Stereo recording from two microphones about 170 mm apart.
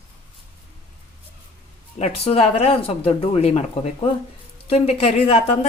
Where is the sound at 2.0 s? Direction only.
35° left (ahead or behind).